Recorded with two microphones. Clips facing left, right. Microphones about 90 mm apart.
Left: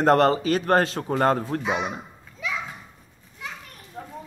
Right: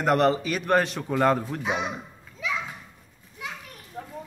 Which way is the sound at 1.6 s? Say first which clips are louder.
Left 2 dB; centre (ahead or behind).